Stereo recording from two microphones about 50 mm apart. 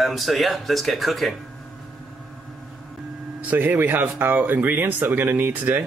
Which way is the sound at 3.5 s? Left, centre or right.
Right.